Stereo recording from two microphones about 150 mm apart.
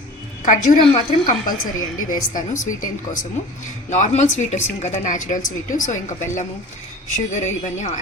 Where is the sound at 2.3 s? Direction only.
60° left (ahead or behind).